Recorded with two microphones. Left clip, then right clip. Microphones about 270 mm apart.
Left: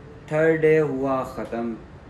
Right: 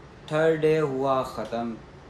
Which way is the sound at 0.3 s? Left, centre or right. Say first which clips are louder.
Left 3 dB; centre.